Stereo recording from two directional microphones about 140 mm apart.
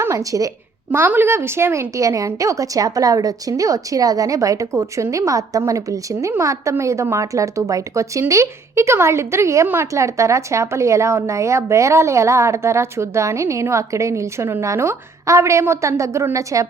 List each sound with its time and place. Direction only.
0.0 s a woman's voice: 25° right (ahead or behind)